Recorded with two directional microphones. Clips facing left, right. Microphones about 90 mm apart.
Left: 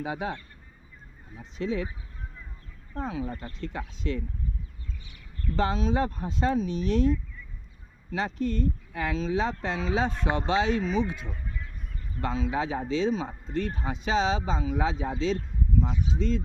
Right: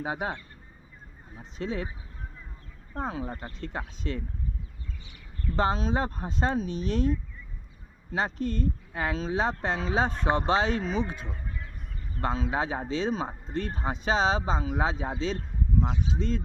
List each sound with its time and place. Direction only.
0.0 s speech: 40° right (ahead or behind)
1.4 s speech: 35° right (ahead or behind)
2.9 s speech: 40° right (ahead or behind)
5.5 s speech: 40° right (ahead or behind)